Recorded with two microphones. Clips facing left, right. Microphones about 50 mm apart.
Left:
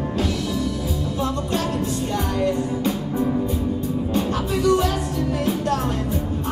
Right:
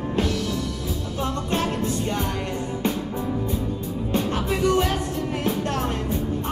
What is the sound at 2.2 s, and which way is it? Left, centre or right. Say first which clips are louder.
Music: left 5 dB; right.